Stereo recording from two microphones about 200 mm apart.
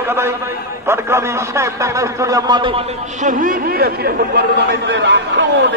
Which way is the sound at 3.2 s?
40° right (ahead or behind).